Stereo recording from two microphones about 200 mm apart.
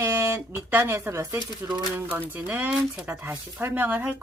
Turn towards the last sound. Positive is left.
turn(degrees=-10)  # may be behind; listen again after turning